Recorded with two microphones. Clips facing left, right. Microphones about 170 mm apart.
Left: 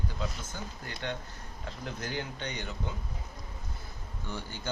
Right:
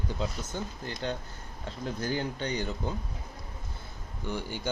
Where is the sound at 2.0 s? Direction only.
35° right (ahead or behind).